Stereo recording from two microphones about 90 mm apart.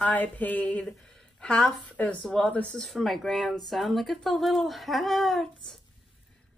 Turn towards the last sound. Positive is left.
turn(degrees=0)  # may be behind; listen again after turning